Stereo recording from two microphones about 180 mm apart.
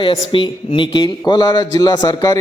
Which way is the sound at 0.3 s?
30° left (ahead or behind).